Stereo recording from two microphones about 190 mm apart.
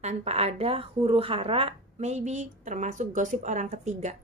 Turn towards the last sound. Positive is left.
turn(degrees=-40)  # may be behind; listen again after turning